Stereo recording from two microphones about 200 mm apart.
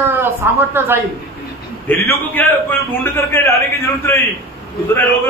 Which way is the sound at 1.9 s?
10° left (ahead or behind).